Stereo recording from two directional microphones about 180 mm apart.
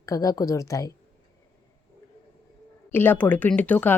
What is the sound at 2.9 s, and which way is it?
Speech, 10° left (ahead or behind).